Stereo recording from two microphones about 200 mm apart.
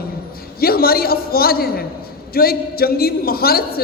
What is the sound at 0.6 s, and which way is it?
A man's voice, 50° left (ahead or behind).